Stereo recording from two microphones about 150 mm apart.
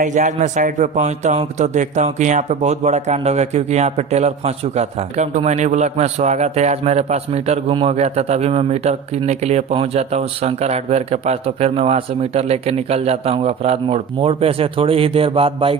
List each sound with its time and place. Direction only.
0.0 s a man's voice: 55° right (ahead or behind); by 15.8 s 40° right (ahead or behind)